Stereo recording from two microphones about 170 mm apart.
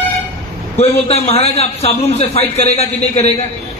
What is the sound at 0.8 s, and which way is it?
A man's voice, 35° left (ahead or behind).